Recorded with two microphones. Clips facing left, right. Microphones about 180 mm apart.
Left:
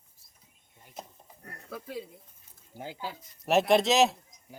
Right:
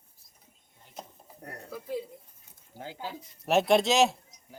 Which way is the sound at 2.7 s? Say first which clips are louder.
Left 1 dB; 15° left (ahead or behind).